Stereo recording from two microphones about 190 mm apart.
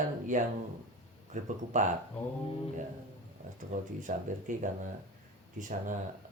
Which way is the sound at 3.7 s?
40° right (ahead or behind).